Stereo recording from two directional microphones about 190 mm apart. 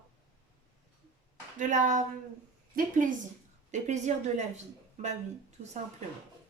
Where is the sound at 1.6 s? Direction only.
40° right (ahead or behind).